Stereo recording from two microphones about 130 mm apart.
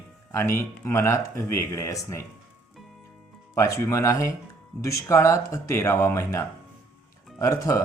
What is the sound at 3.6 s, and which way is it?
Speech, 25° left (ahead or behind).